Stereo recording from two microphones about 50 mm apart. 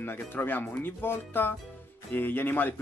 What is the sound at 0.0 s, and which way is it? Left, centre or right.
Speech, left.